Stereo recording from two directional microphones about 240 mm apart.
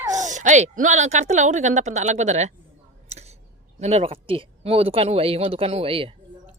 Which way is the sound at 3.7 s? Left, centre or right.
Right.